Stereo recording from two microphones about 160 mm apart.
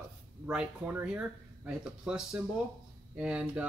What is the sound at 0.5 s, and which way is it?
Speech, 5° right (ahead or behind).